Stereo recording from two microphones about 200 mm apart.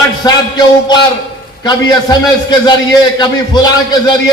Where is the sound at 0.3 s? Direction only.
20° left (ahead or behind).